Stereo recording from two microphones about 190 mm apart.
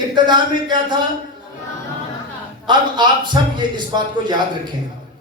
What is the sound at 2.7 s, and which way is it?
A man's voice, 25° right (ahead or behind).